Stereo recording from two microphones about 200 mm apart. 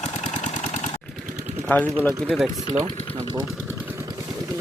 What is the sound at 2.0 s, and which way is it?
Speech, centre (ahead or behind).